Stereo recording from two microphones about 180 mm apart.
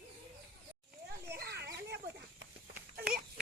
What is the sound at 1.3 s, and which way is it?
Children playing, 60° right (ahead or behind).